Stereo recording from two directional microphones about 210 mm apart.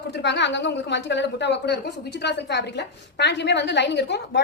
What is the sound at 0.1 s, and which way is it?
A woman's voice, 55° left (ahead or behind).